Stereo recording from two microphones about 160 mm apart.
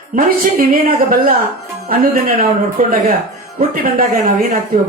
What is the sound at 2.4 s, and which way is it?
Speech, 65° right (ahead or behind).